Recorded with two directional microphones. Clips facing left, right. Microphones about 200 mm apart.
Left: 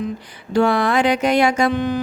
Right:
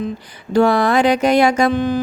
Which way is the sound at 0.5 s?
40° right (ahead or behind).